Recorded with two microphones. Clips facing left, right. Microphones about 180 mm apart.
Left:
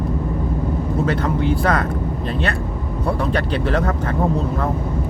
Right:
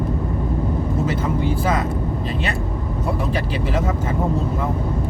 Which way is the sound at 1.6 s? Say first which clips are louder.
Left 2 dB; 65° left (ahead or behind).